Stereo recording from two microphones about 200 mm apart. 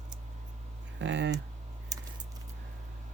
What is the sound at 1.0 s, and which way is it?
Speech, 65° right (ahead or behind).